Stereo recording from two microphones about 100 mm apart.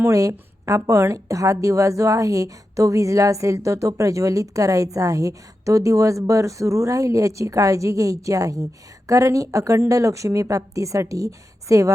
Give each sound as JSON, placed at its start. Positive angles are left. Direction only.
{"t": 0.0, "sound": "a woman's voice", "side_deg": -35}